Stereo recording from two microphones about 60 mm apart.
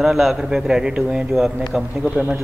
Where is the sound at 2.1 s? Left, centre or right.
Centre.